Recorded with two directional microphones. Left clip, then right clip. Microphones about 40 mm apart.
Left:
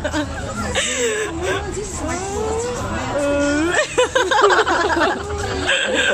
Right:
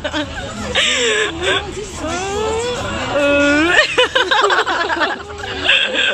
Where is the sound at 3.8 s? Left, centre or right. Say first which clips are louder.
Right 4 dB; centre.